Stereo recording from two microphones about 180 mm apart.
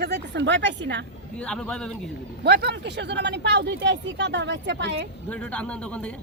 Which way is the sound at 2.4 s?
65° right (ahead or behind).